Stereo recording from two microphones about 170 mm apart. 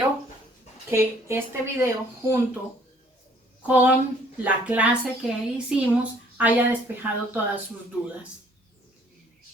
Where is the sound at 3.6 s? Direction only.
10° right (ahead or behind).